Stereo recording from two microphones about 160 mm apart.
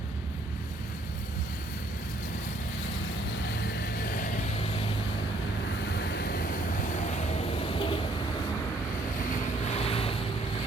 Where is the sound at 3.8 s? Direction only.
65° left (ahead or behind); by 4.9 s 40° left (ahead or behind).